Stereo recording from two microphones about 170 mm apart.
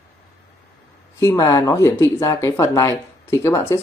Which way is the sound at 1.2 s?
15° left (ahead or behind).